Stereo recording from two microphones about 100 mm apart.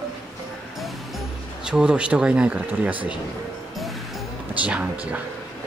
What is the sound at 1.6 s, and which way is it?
Speech, 10° right (ahead or behind).